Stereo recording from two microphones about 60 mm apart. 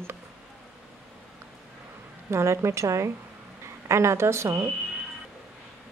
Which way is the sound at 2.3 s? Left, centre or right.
Right.